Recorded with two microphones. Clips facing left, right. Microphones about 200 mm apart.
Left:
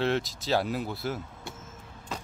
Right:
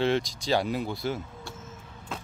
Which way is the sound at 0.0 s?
Centre (ahead or behind).